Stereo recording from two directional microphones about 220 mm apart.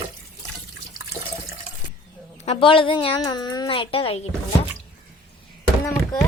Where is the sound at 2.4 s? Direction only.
25° left (ahead or behind).